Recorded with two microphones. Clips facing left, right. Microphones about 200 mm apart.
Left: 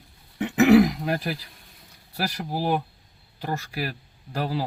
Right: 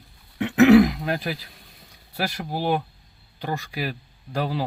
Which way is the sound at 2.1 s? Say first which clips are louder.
Right 1 dB; 5° left (ahead or behind).